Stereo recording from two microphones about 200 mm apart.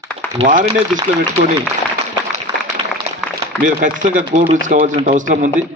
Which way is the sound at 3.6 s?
40° right (ahead or behind).